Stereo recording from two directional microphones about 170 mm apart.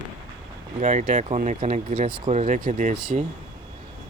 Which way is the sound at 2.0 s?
30° right (ahead or behind).